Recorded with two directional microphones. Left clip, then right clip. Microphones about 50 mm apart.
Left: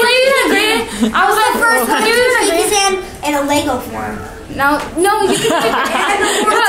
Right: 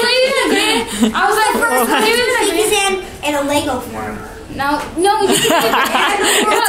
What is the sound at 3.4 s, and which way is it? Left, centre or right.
Speech, left.